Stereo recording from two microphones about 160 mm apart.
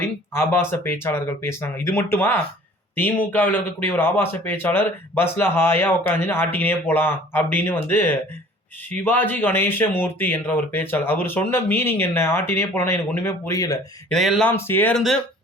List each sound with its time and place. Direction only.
0.0 s a man's voice: 15° left (ahead or behind)
14.1 s speech: centre (ahead or behind)
14.5 s a man's voice: 15° left (ahead or behind)